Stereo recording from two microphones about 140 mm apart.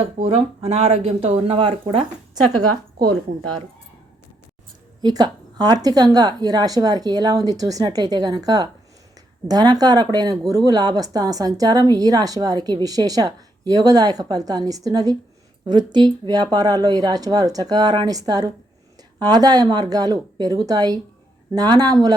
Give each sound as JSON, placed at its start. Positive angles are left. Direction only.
{"t": 0.3, "sound": "speech", "side_deg": -45}
{"t": 5.0, "sound": "speech", "side_deg": -30}